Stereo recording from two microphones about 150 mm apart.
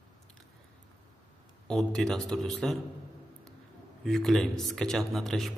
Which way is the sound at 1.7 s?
5° left (ahead or behind).